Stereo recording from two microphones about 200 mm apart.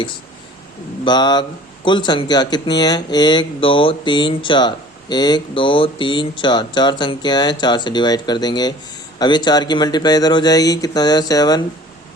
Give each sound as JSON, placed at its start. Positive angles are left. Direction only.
{"t": 1.0, "sound": "speech", "side_deg": 20}